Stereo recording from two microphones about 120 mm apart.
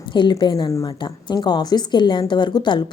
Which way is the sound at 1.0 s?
40° left (ahead or behind).